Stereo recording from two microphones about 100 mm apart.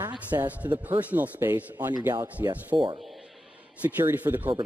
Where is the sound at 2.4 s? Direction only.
30° right (ahead or behind).